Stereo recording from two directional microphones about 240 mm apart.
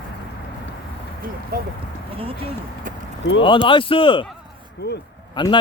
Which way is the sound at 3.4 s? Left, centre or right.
Left.